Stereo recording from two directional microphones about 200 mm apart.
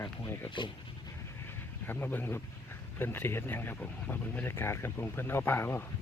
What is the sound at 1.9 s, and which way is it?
Speech, 10° left (ahead or behind).